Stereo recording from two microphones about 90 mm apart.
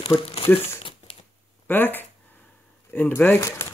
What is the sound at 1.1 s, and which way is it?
Shuffling cards, 90° left.